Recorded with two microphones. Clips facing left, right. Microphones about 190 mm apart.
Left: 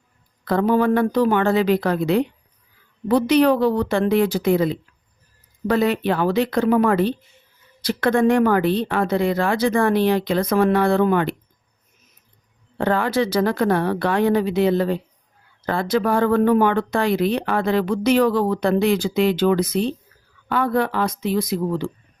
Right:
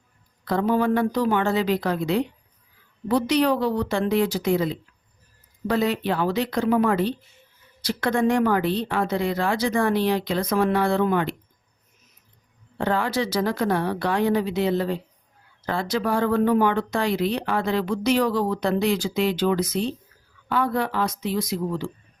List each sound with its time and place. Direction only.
0.4 s speech: 60° left (ahead or behind)
12.8 s speech: 55° left (ahead or behind)